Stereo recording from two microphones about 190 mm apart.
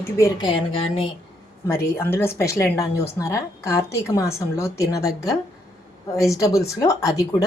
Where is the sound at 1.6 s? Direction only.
10° left (ahead or behind).